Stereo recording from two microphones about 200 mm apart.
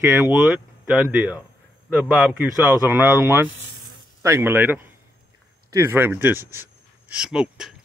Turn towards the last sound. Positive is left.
turn(degrees=-5)  # may be behind; listen again after turning